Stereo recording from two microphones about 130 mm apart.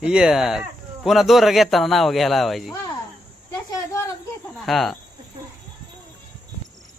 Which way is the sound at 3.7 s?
25° left (ahead or behind).